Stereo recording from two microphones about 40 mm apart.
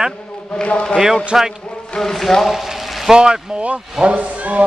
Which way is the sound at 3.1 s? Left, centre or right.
Centre.